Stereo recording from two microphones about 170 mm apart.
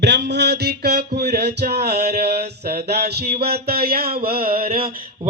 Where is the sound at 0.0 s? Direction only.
85° right.